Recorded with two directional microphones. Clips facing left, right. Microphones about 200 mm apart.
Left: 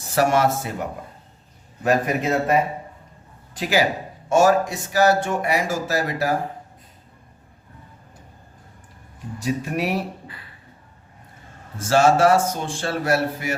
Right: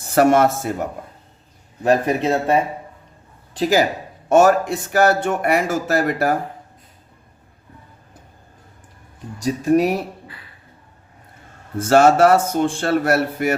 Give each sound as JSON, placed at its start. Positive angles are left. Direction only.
{"t": 0.1, "sound": "speech", "side_deg": -50}
{"t": 1.8, "sound": "speech", "side_deg": -30}
{"t": 3.6, "sound": "speech", "side_deg": -45}
{"t": 4.3, "sound": "speech", "side_deg": -55}
{"t": 9.4, "sound": "speech", "side_deg": -40}
{"t": 11.8, "sound": "speech", "side_deg": -55}